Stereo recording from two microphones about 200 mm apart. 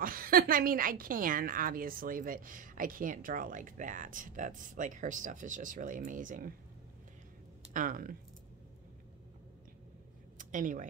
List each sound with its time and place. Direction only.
0.0 s a woman's voice: 45° right (ahead or behind)
7.7 s a woman's voice: 45° right (ahead or behind)
10.3 s speech: 40° right (ahead or behind)